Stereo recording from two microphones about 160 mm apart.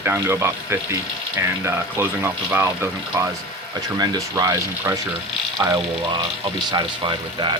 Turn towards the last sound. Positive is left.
turn(degrees=-30)  # may be behind; listen again after turning